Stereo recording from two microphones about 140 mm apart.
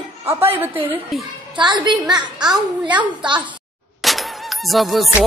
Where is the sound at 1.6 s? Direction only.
30° right (ahead or behind).